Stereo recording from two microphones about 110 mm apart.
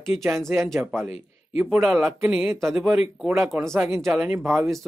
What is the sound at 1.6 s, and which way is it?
Speech, 5° right (ahead or behind).